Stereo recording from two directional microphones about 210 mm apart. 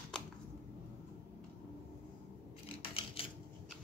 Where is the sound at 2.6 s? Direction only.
25° left (ahead or behind).